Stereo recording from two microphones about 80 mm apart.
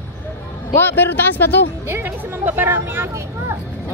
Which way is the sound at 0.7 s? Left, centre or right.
Left.